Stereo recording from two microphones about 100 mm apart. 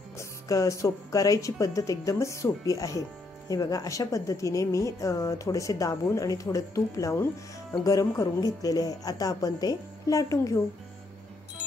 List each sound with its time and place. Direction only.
0.2 s a woman's voice: 35° left (ahead or behind)